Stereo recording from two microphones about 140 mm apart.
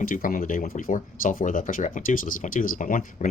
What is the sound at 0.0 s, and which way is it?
Speech, 80° left.